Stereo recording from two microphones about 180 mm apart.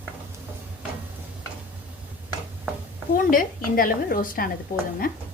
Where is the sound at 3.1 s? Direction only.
50° left (ahead or behind).